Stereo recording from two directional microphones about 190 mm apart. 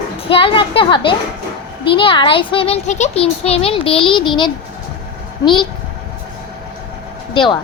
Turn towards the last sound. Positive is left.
turn(degrees=25)  # may be behind; listen again after turning